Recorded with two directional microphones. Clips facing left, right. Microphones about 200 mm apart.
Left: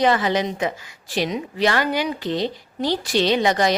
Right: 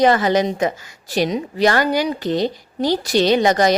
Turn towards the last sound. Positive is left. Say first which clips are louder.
# right 4 dB
turn(degrees=-45)  # may be behind; listen again after turning